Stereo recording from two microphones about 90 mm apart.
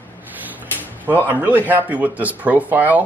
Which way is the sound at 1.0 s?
20° right (ahead or behind).